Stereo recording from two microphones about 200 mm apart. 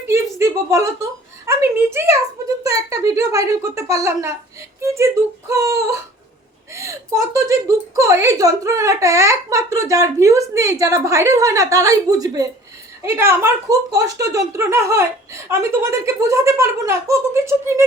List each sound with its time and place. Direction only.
0.1 s a sound: 15° right (ahead or behind)
1.5 s speech: 10° right (ahead or behind)
7.9 s speech: 15° right (ahead or behind)